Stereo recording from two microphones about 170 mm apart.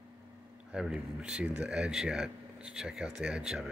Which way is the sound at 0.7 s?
5° right (ahead or behind).